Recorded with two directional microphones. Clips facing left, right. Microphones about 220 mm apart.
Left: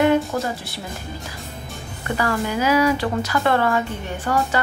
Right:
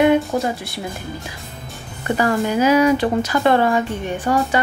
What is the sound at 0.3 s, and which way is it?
Speech, 15° right (ahead or behind).